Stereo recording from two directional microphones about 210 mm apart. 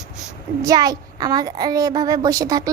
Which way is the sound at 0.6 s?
20° right (ahead or behind).